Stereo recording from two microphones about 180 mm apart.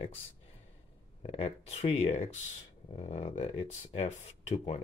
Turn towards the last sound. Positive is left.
turn(degrees=40)  # may be behind; listen again after turning